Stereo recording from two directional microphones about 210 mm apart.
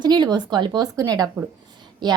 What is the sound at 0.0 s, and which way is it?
A woman's voice, 20° right (ahead or behind).